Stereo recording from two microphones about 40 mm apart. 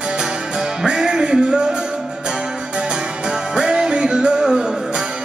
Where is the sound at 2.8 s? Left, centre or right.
Right.